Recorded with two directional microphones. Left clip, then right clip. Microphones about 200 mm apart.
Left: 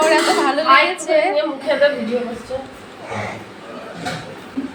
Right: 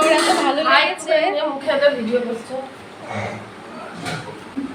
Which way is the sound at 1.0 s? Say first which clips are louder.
Left 1 dB; 5° left (ahead or behind).